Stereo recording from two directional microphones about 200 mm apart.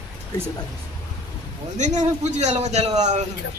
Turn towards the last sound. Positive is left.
turn(degrees=-35)  # may be behind; listen again after turning